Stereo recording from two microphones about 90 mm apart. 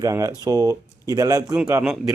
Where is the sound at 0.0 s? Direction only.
40° right (ahead or behind).